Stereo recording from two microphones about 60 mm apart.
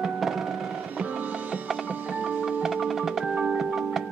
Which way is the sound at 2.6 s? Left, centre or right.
Centre.